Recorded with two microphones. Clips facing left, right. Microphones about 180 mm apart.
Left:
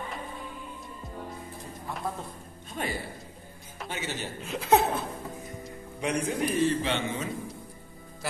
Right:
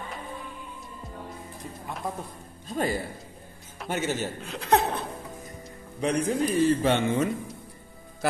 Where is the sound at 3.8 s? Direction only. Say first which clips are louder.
Right 7 dB; 50° right (ahead or behind).